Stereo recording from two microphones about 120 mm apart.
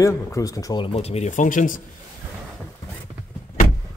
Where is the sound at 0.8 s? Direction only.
55° left (ahead or behind); by 1.8 s 90° left.